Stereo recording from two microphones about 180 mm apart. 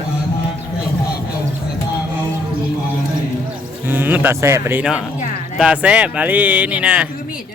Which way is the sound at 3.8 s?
10° right (ahead or behind).